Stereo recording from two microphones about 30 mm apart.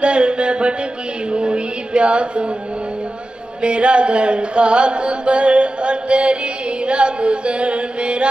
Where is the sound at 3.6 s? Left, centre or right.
Right.